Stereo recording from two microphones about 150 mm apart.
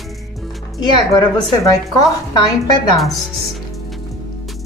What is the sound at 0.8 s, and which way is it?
Speech, 25° left (ahead or behind).